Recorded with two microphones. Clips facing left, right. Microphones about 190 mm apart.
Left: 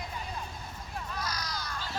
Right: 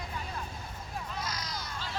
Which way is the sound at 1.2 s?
25° right (ahead or behind).